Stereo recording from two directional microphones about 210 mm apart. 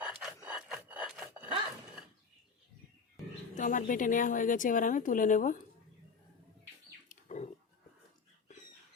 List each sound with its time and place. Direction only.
0.0 s rub: 5° right (ahead or behind)
3.5 s a woman's voice: 40° left (ahead or behind)
7.1 s a sound: 35° left (ahead or behind)